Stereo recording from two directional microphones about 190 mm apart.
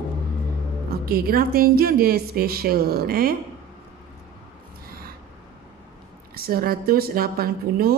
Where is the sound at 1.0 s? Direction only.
50° right (ahead or behind).